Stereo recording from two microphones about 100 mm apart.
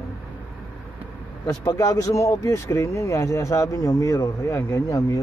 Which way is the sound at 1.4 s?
30° left (ahead or behind).